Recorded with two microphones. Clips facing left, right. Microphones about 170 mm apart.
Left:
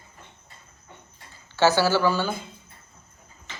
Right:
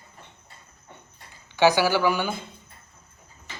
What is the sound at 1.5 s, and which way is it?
Speech, 15° right (ahead or behind).